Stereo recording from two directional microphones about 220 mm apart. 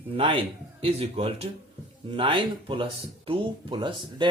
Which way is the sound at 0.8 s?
25° right (ahead or behind).